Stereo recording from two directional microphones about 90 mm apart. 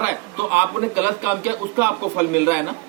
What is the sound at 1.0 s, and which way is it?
A man's voice, 25° right (ahead or behind).